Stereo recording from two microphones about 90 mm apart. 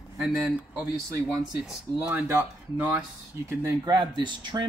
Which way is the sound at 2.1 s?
20° right (ahead or behind).